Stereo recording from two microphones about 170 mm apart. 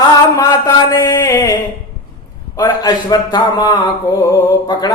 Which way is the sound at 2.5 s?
25° left (ahead or behind).